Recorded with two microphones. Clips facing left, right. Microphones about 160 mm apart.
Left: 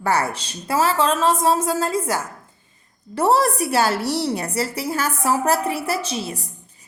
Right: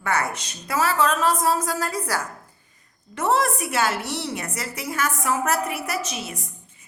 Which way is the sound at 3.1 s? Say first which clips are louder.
Left 4 dB; 35° left (ahead or behind).